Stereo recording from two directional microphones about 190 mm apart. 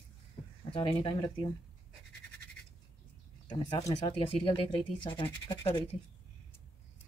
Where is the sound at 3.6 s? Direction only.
25° left (ahead or behind).